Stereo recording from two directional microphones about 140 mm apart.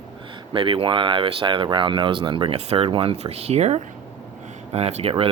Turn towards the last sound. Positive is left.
turn(degrees=-45)  # may be behind; listen again after turning